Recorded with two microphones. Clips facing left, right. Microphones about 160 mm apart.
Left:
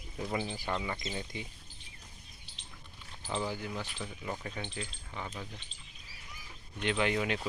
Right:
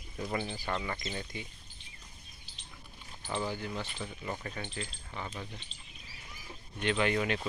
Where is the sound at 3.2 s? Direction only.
5° left (ahead or behind).